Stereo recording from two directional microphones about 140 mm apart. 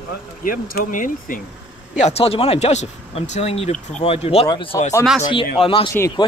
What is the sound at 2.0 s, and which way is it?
A man's voice, 50° left (ahead or behind).